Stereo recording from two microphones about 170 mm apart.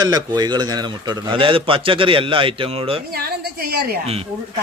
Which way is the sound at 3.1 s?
65° right (ahead or behind).